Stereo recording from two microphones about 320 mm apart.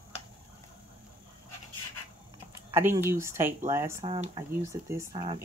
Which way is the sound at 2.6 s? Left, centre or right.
Centre.